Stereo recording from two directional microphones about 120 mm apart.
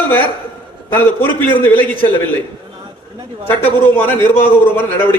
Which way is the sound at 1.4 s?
15° left (ahead or behind).